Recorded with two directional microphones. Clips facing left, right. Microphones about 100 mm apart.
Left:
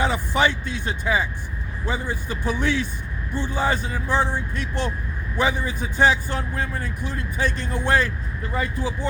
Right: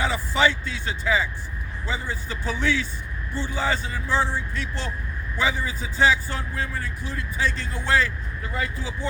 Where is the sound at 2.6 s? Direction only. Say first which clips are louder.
Even; 55° left (ahead or behind).